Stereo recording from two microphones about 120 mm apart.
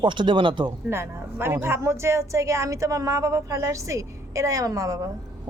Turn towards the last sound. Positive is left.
turn(degrees=-25)  # may be behind; listen again after turning